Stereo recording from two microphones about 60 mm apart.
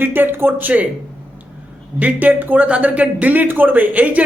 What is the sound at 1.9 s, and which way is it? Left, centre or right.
Speech, right.